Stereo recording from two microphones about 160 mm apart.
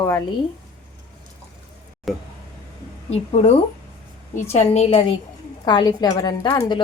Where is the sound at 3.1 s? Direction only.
40° left (ahead or behind).